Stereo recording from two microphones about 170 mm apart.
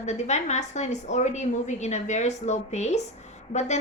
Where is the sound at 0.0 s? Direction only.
40° left (ahead or behind).